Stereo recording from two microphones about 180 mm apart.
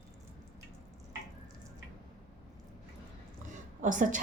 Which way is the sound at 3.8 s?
45° right (ahead or behind).